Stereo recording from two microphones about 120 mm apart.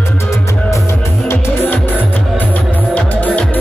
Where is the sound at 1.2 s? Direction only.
20° left (ahead or behind).